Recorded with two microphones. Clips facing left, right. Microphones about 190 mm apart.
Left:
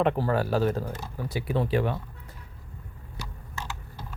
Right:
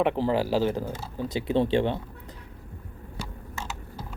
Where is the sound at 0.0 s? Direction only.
15° right (ahead or behind).